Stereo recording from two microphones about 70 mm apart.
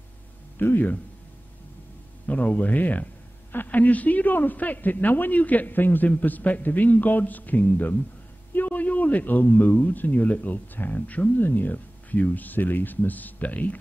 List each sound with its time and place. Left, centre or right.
0.6 s speech: left
2.2 s a man's voice: left